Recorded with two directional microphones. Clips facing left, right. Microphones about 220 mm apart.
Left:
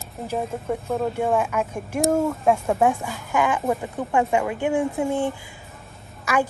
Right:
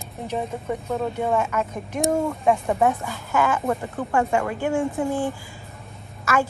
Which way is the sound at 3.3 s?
15° left (ahead or behind).